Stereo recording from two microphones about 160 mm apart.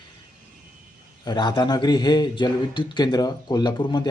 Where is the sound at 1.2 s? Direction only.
25° left (ahead or behind).